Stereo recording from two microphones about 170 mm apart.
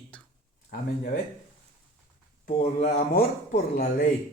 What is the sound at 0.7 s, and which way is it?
Speech, 65° left (ahead or behind).